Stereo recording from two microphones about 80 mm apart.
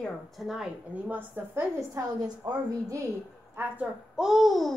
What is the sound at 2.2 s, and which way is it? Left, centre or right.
Speech, right.